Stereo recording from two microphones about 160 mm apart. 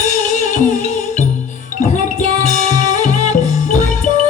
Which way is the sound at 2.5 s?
45° left (ahead or behind).